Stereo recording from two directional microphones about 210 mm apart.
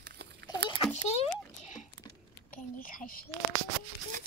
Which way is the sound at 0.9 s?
30° left (ahead or behind).